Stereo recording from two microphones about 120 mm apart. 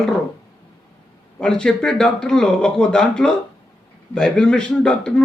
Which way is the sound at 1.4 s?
5° left (ahead or behind).